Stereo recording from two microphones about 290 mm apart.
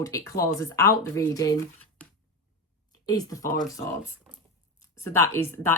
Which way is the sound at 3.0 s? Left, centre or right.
Centre.